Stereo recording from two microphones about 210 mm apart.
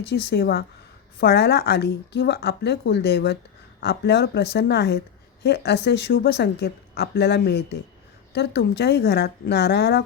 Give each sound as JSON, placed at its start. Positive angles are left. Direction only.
{"t": 0.1, "sound": "speech", "side_deg": 50}